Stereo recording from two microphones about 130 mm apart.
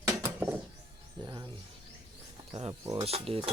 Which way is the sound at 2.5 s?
50° right (ahead or behind).